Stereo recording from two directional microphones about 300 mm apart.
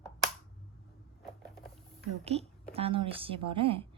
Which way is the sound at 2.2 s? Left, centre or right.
Right.